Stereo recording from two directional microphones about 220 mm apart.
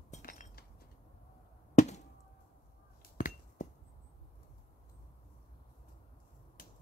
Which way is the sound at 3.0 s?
40° left (ahead or behind).